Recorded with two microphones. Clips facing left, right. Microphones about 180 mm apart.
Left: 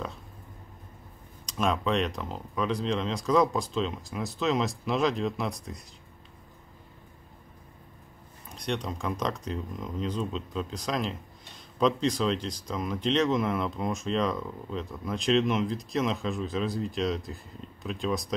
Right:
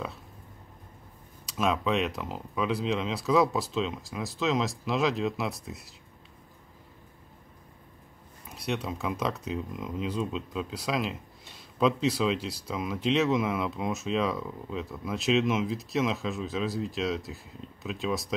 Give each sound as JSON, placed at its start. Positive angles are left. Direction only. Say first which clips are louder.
{"t": 1.4, "sound": "speech", "louder": "even", "side_deg": -5}
{"t": 8.5, "sound": "speech", "louder": "even", "side_deg": -5}